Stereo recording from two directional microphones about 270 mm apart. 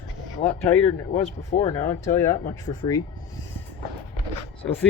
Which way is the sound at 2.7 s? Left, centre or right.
Left.